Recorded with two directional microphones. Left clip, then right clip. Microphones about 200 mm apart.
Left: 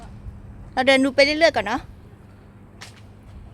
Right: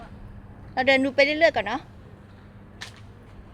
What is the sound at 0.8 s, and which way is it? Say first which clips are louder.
A woman's voice: left 3 dB; 35° left (ahead or behind).